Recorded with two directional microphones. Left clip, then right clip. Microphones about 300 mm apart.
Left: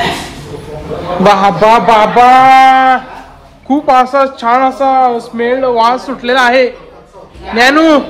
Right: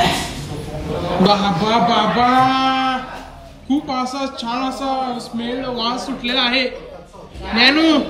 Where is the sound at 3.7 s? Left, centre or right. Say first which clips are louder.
Left 13 dB; centre.